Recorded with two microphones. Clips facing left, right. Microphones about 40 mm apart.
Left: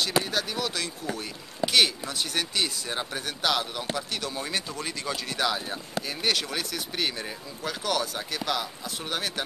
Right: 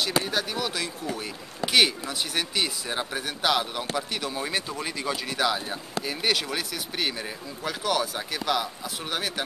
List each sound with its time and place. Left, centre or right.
0.0 s speech: centre